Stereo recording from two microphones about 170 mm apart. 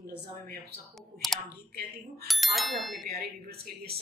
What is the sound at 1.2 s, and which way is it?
Clicking, centre (ahead or behind).